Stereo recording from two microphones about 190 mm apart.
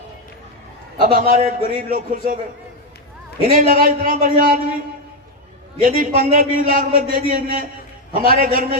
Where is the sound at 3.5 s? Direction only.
45° right (ahead or behind).